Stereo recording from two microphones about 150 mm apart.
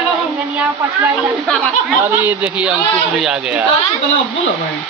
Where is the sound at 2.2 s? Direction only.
10° right (ahead or behind).